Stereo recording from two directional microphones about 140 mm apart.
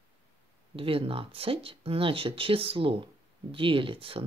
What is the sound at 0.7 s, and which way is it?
Speech, 40° right (ahead or behind).